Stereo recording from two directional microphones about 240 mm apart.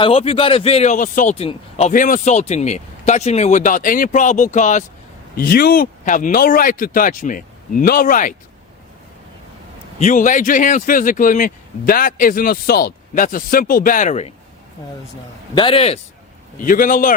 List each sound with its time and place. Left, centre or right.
0.0 s speech: left
10.0 s speech: left
15.5 s speech: left
16.6 s speech: left